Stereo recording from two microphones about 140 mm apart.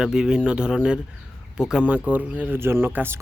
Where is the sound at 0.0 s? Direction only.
5° right (ahead or behind).